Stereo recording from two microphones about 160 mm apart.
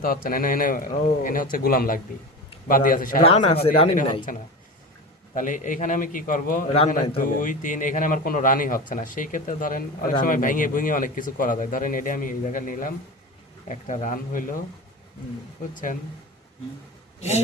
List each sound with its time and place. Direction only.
0.0 s a man's voice: 65° left (ahead or behind)
3.2 s speech: 35° left (ahead or behind)
4.3 s a man's voice: 60° left (ahead or behind)
15.7 s a man's voice: 55° left (ahead or behind)
17.2 s a man's voice: 45° left (ahead or behind)